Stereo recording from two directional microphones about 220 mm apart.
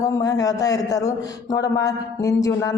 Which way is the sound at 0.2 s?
15° left (ahead or behind).